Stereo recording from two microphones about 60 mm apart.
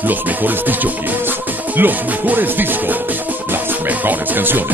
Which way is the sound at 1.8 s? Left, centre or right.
Right.